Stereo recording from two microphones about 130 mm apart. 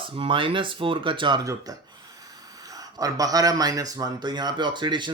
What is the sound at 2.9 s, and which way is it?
A man's voice, 25° right (ahead or behind).